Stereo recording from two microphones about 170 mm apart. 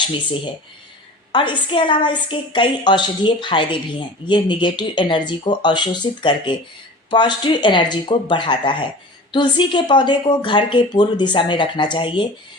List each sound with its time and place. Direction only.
1.3 s a woman's voice: 30° left (ahead or behind)